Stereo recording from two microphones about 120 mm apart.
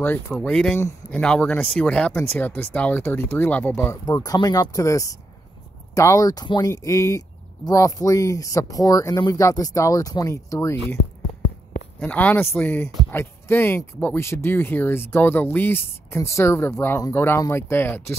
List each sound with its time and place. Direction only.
0.3 s speech: 5° left (ahead or behind)
4.0 s speech: 30° left (ahead or behind)
12.0 s speech: 10° left (ahead or behind)